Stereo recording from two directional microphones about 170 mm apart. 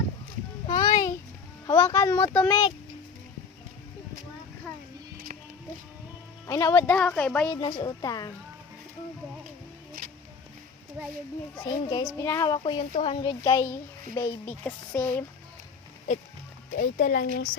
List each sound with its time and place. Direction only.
0.7 s a sound: 25° left (ahead or behind)
1.6 s speech: 20° left (ahead or behind)
2.5 s a woman's voice: 30° left (ahead or behind)
6.5 s a woman's voice: 20° left (ahead or behind)
7.5 s a woman's voice: 25° left (ahead or behind)
11.0 s a child's voice: 10° right (ahead or behind)
11.6 s a woman's voice: 25° left (ahead or behind)
12.5 s a woman's voice: 30° left (ahead or behind)
13.4 s a woman's voice: 20° left (ahead or behind)
16.7 s speech: 60° left (ahead or behind)